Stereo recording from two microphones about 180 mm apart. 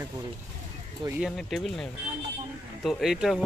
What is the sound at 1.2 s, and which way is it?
Speech, centre (ahead or behind).